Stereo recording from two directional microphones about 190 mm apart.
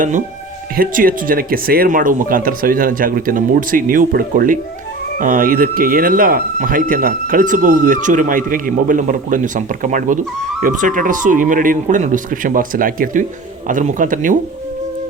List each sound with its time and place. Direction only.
0.8 s speech: 45° right (ahead or behind)